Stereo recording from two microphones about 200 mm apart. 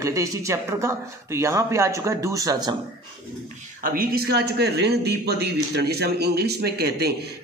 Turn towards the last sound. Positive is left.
turn(degrees=-55)  # may be behind; listen again after turning